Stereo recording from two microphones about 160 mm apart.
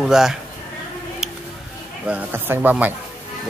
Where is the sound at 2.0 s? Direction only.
10° right (ahead or behind).